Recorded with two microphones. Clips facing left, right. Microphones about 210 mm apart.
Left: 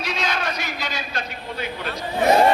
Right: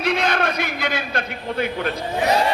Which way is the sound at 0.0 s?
55° right (ahead or behind).